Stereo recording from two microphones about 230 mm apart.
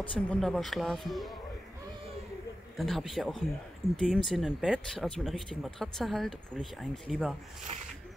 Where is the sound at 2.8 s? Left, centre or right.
Centre.